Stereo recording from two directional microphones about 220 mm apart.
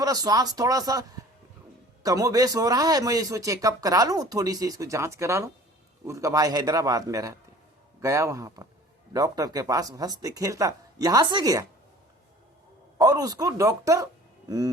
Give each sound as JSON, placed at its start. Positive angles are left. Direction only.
{"t": 0.0, "sound": "a man's voice", "side_deg": -15}
{"t": 2.0, "sound": "a man's voice", "side_deg": -15}
{"t": 13.0, "sound": "a man's voice", "side_deg": -15}